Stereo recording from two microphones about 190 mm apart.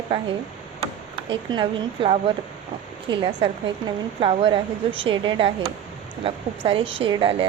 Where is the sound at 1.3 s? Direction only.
25° right (ahead or behind).